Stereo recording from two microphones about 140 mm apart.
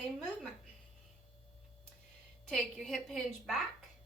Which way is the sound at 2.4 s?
5° left (ahead or behind).